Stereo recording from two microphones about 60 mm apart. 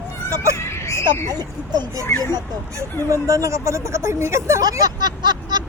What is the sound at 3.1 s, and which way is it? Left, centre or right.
Speech, right.